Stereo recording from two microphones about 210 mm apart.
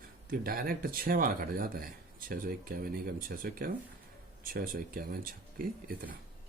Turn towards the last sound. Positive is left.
turn(degrees=-45)  # may be behind; listen again after turning